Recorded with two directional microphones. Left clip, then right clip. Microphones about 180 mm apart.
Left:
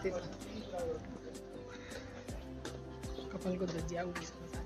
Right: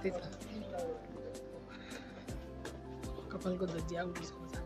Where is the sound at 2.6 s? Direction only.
Centre (ahead or behind).